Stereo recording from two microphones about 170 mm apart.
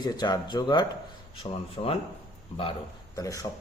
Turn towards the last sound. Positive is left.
turn(degrees=20)  # may be behind; listen again after turning